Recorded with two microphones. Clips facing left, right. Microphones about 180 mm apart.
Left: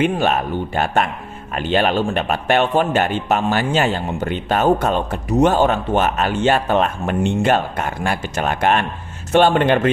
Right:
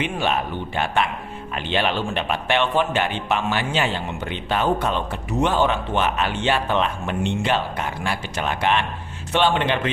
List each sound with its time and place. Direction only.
0.0 s a man's voice: 45° left (ahead or behind)